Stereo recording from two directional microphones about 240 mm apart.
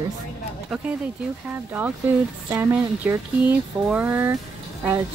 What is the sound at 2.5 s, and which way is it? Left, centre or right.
Speech, centre.